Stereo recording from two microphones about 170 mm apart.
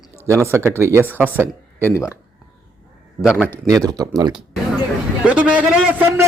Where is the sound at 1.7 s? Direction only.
15° left (ahead or behind).